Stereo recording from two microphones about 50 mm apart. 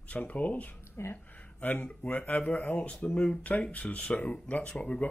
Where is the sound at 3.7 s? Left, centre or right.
Left.